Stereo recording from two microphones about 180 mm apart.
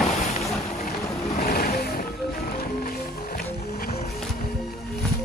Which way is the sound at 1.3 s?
55° left (ahead or behind).